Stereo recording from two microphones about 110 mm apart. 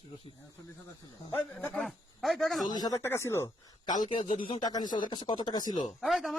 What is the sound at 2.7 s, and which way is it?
Speech, 35° left (ahead or behind).